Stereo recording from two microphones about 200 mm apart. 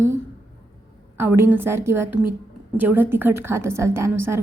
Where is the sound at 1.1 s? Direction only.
10° right (ahead or behind).